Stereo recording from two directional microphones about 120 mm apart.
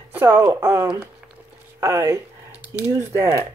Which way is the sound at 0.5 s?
20° right (ahead or behind).